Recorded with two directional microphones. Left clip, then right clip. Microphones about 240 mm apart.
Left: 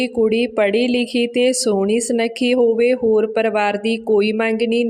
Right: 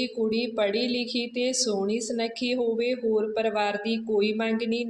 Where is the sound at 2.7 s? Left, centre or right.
Left.